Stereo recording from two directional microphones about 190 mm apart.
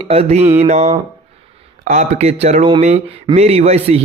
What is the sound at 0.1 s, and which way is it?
Speech, 35° right (ahead or behind).